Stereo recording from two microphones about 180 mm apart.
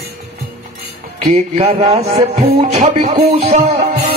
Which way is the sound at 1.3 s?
35° right (ahead or behind).